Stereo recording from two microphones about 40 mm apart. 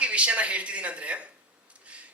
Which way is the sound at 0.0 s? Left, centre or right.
Right.